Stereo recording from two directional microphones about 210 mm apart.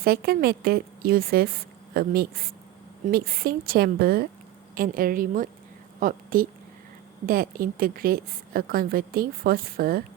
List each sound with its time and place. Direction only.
0.0 s a woman's voice: 45° right (ahead or behind)